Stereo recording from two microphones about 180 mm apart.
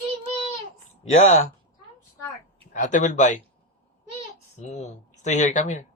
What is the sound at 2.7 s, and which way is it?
Speech, 45° left (ahead or behind).